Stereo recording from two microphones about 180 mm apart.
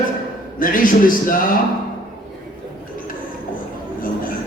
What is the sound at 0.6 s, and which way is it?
Speech, 50° left (ahead or behind).